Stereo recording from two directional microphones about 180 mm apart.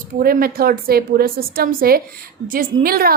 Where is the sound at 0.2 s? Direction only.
55° right (ahead or behind).